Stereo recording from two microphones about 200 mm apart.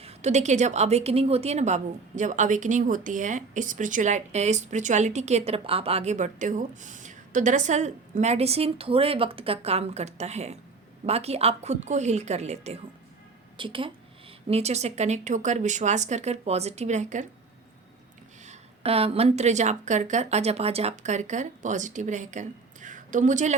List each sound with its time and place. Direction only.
0.0 s a woman's voice: 35° right (ahead or behind)
18.4 s a woman's voice: 30° right (ahead or behind)